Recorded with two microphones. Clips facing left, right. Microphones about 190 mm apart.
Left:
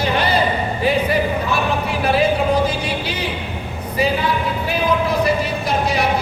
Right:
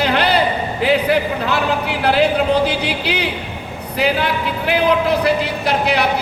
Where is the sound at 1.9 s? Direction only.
70° right (ahead or behind).